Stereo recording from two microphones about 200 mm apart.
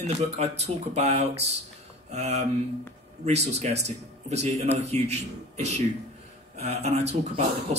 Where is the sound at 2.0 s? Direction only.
35° right (ahead or behind).